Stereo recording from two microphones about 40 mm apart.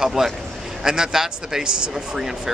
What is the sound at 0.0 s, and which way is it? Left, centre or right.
A man's voice, centre.